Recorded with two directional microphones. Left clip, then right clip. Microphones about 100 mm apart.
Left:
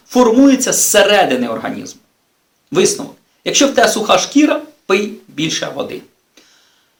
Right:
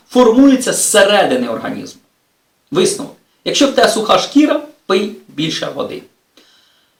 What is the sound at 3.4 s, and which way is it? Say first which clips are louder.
Speech: even; 10° right (ahead or behind).